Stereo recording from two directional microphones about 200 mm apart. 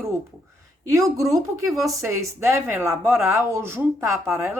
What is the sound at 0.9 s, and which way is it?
Speech, 15° right (ahead or behind).